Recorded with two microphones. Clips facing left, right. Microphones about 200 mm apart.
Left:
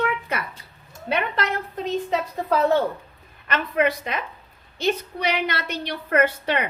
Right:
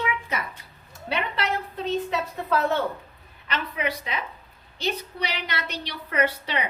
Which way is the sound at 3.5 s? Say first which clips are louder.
Left 7 dB; 50° left (ahead or behind).